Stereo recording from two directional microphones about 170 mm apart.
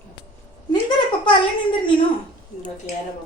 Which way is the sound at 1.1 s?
30° left (ahead or behind).